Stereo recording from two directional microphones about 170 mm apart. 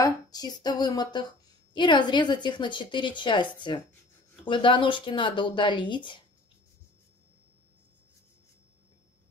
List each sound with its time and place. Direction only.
0.0 s a woman's voice: 25° left (ahead or behind)